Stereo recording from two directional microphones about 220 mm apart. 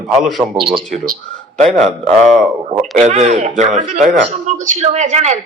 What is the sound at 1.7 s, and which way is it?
Speech, centre (ahead or behind).